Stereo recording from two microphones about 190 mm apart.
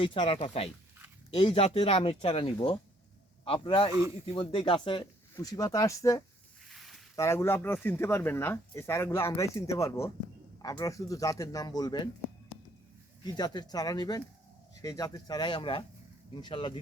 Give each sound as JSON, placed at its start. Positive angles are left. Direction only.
{"t": 0.0, "sound": "a man's voice", "side_deg": 30}
{"t": 6.7, "sound": "a sound", "side_deg": 0}
{"t": 7.2, "sound": "a man's voice", "side_deg": 15}
{"t": 13.2, "sound": "a man's voice", "side_deg": 20}